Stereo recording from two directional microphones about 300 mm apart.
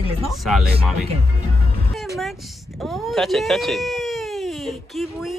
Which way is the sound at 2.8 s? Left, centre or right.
Centre.